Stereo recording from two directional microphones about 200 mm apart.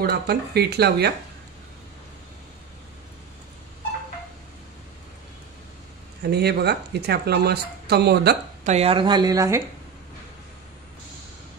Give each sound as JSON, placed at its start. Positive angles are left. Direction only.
{"t": 0.0, "sound": "speech", "side_deg": -50}
{"t": 6.2, "sound": "speech", "side_deg": -55}
{"t": 8.6, "sound": "speech", "side_deg": -30}